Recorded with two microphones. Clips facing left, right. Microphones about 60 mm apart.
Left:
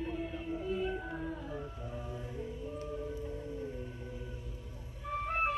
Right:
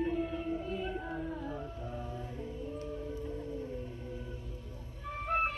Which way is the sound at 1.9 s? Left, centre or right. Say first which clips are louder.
Right 1 dB; centre.